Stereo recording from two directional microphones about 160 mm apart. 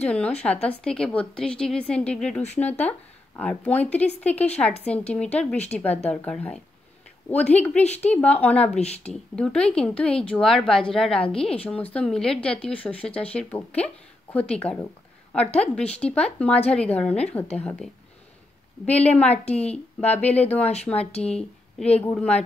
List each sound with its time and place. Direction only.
0.0 s a woman's voice: 10° left (ahead or behind)
18.9 s a woman's voice: 10° left (ahead or behind)
20.9 s speech: 40° left (ahead or behind)
21.2 s a woman's voice: 5° left (ahead or behind)